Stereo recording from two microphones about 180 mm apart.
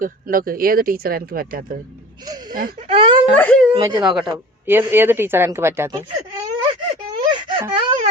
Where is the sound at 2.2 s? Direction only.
20° right (ahead or behind).